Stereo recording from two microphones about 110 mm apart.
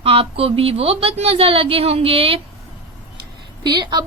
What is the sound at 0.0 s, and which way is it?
A woman's voice, 60° right (ahead or behind).